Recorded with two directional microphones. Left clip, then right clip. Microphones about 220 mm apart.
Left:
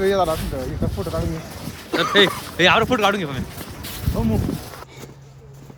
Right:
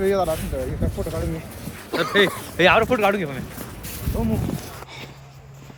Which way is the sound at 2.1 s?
Centre (ahead or behind).